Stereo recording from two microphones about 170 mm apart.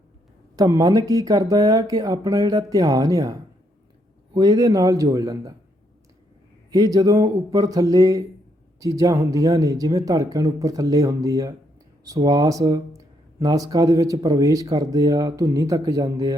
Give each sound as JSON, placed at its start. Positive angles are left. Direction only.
{"t": 0.5, "sound": "speech", "side_deg": -20}
{"t": 4.4, "sound": "speech", "side_deg": -20}
{"t": 6.7, "sound": "speech", "side_deg": -20}